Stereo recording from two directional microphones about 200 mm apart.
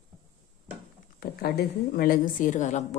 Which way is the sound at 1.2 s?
50° left (ahead or behind).